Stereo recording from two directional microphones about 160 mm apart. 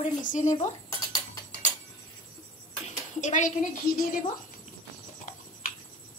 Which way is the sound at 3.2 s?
50° left (ahead or behind).